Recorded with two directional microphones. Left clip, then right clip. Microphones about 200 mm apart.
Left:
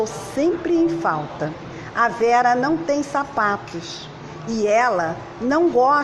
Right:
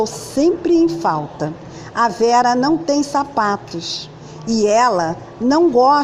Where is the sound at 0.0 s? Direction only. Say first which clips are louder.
Right 4 dB; 55° right (ahead or behind).